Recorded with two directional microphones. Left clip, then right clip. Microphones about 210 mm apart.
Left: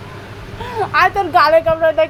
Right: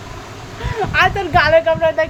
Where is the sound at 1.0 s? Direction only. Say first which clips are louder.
Left 2 dB; 5° left (ahead or behind).